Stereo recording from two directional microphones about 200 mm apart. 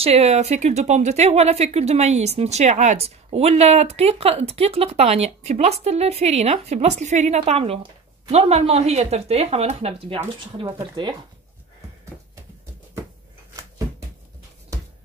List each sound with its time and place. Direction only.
0.0 s speech: 30° right (ahead or behind)